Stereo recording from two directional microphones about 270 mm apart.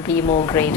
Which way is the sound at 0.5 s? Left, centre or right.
Centre.